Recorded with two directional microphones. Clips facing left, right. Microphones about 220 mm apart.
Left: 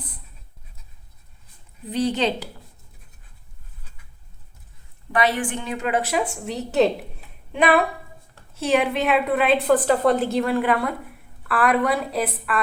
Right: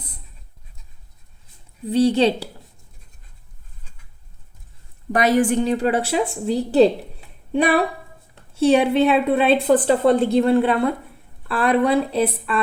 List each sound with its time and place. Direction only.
2.1 s a woman's voice: 30° right (ahead or behind)
5.1 s a woman's voice: 40° right (ahead or behind)